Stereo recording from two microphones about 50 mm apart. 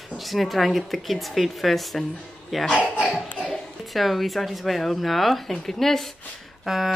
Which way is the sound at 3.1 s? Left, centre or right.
Left.